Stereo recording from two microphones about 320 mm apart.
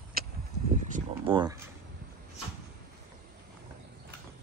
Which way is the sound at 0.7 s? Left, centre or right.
Centre.